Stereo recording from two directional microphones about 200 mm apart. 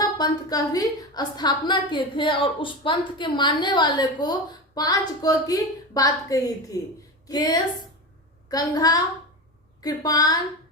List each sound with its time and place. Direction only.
0.0 s a woman's voice: 20° left (ahead or behind)